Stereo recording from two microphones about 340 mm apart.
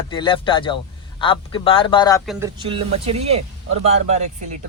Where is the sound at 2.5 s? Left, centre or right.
Centre.